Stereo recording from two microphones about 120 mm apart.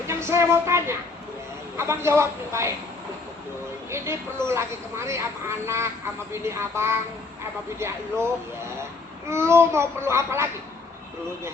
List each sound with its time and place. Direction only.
0.1 s speech: 25° right (ahead or behind)
3.9 s speech: 20° right (ahead or behind)
9.3 s speech: 20° right (ahead or behind)